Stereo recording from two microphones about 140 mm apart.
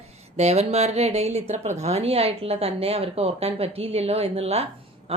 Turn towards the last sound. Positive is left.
turn(degrees=-45)  # may be behind; listen again after turning